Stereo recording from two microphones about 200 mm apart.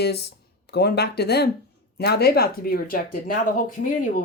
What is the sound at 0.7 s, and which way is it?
Speech, 55° left (ahead or behind).